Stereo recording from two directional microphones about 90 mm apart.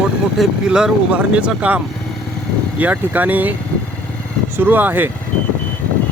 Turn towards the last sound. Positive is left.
turn(degrees=-20)  # may be behind; listen again after turning